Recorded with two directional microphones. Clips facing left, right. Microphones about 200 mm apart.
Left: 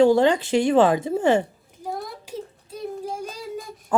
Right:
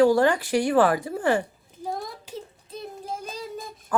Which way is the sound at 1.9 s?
5° left (ahead or behind).